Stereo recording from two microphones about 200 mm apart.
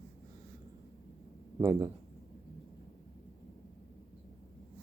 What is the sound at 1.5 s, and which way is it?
Speech, 15° right (ahead or behind).